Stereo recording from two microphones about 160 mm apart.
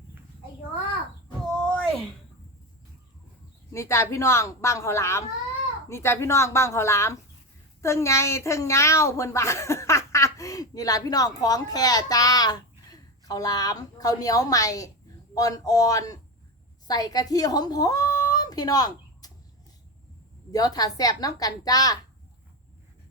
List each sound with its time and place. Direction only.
1.5 s a sound: centre (ahead or behind)
3.7 s a woman's voice: 15° left (ahead or behind)
20.5 s a woman's voice: 25° left (ahead or behind)